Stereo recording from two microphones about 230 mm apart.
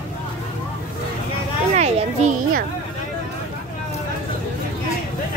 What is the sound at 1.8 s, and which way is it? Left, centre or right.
Children playing, right.